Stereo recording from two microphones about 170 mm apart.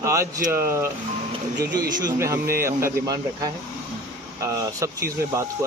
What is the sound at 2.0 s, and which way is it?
Speech, 20° right (ahead or behind).